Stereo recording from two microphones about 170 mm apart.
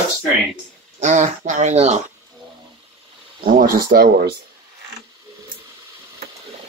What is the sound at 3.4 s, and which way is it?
Speech, 60° right (ahead or behind).